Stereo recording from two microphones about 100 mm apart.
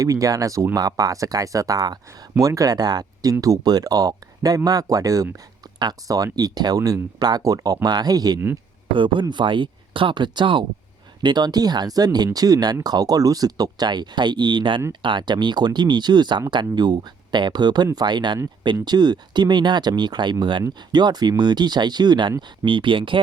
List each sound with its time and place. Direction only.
0.0 s speech: 35° right (ahead or behind)
9.3 s speech: 55° right (ahead or behind)